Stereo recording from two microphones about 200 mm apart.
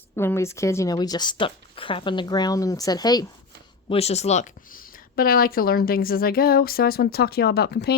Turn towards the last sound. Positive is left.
turn(degrees=55)  # may be behind; listen again after turning